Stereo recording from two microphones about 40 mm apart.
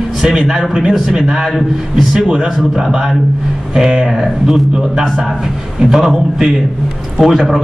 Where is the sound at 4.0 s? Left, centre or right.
Right.